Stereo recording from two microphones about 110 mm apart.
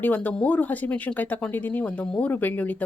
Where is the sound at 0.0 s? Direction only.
15° left (ahead or behind).